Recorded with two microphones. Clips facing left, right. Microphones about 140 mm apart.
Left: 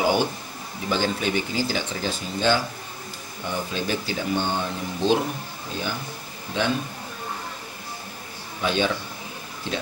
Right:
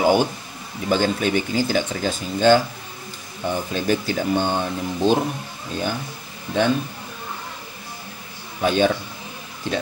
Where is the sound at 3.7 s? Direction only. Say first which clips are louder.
Right 7 dB; 45° right (ahead or behind).